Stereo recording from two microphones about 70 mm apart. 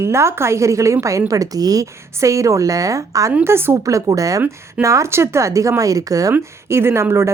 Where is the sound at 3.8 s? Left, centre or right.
Right.